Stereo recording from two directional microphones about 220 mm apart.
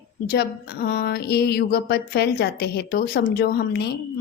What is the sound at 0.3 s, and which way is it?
A woman's voice, 45° left (ahead or behind).